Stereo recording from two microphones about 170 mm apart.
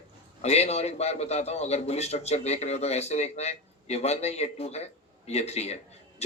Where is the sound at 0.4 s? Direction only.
40° left (ahead or behind).